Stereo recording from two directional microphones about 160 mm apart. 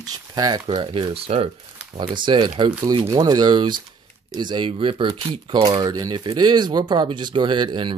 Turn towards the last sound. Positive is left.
turn(degrees=-30)  # may be behind; listen again after turning